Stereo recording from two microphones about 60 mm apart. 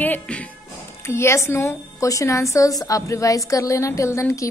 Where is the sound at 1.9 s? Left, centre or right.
Left.